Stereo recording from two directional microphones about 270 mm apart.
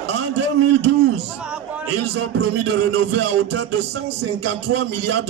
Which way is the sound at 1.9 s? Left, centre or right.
Right.